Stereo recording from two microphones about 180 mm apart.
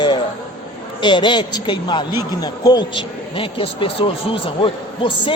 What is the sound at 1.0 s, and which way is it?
A woman's voice, 25° left (ahead or behind).